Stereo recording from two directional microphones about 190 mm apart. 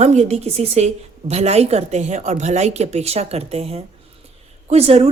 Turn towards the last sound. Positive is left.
turn(degrees=-35)  # may be behind; listen again after turning